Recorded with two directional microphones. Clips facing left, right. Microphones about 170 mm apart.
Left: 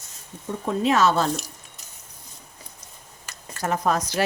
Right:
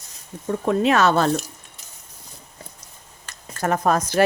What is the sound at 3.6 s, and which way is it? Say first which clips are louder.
Speech: right 3 dB; 55° right (ahead or behind).